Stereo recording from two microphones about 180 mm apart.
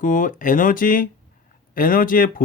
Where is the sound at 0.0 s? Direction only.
45° left (ahead or behind).